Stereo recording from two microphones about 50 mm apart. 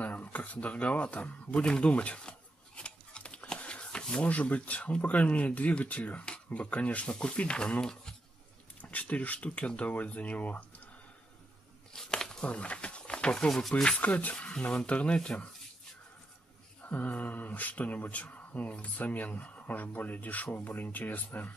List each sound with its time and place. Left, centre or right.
0.0 s a sound: left
4.2 s speech: left; by 8.1 s centre
8.9 s speech: left
11.9 s a sound: centre
12.4 s speech: left
13.5 s speech: centre
14.0 s speech: left
16.8 s speech: left